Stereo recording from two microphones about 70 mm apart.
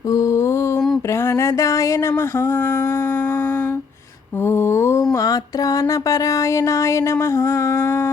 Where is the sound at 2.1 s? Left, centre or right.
Left.